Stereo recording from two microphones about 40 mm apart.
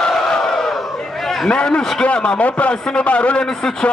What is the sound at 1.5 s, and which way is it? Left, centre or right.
A man's voice, left.